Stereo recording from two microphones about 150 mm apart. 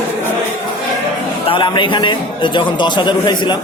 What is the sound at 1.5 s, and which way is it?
A man's voice, 35° left (ahead or behind).